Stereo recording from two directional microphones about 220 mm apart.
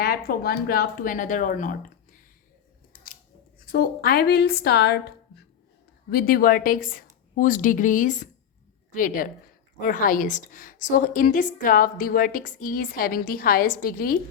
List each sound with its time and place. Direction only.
0.0 s a woman's voice: 45° left (ahead or behind)
2.9 s scissors: 40° left (ahead or behind)
3.7 s a woman's voice: 45° left (ahead or behind)